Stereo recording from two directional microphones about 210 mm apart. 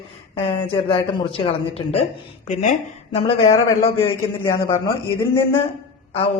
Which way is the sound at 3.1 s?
30° left (ahead or behind).